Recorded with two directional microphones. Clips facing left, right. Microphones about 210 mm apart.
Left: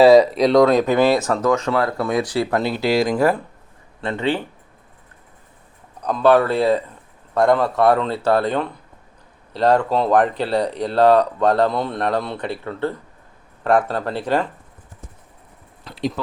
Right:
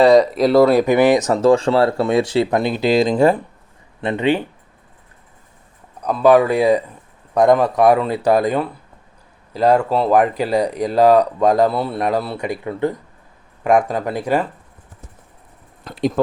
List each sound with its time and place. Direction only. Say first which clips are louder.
0.0 s speech: left 1 dB; centre (ahead or behind); by 4.4 s 15° right (ahead or behind)
6.0 s speech: right 2 dB; 10° right (ahead or behind)
15.8 s speech: right 6 dB; 50° right (ahead or behind)